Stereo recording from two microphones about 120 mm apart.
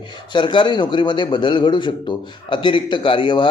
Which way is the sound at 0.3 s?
40° left (ahead or behind).